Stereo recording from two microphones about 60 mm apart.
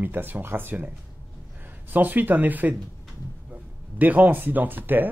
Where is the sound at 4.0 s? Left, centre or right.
Right.